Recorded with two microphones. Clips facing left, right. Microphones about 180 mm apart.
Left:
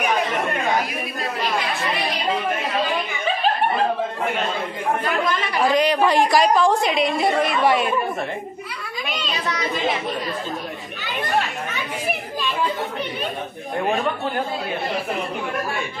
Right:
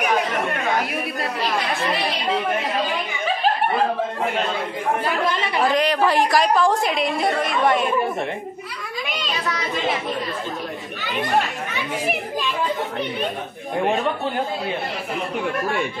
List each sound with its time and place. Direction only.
5.0 s speech: 30° right (ahead or behind)
5.7 s a woman's voice: centre (ahead or behind)